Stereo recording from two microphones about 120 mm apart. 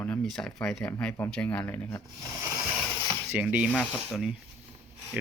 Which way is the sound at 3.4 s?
10° right (ahead or behind).